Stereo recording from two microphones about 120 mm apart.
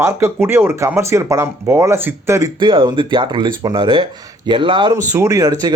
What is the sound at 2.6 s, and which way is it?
Speech, 40° right (ahead or behind).